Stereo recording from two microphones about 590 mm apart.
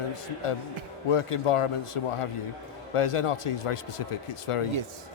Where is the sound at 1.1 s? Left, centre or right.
Left.